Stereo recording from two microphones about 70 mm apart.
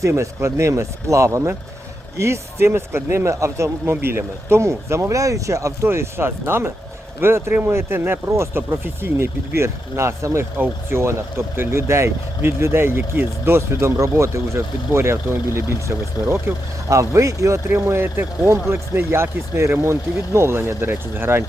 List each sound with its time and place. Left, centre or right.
0.0 s speech: right
16.9 s speech: right
17.7 s speech: right